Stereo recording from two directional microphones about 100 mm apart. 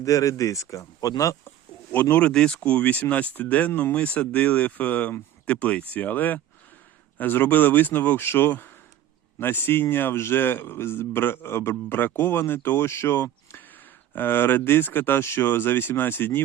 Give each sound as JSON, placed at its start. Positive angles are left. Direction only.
{"t": 0.0, "sound": "speech", "side_deg": 35}
{"t": 1.5, "sound": "a man's voice", "side_deg": 20}